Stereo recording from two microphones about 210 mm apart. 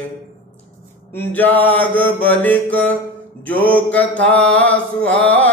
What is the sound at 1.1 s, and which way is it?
Mantra, 10° left (ahead or behind).